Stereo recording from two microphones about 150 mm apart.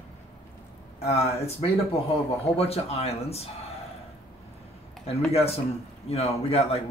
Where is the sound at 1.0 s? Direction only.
45° left (ahead or behind).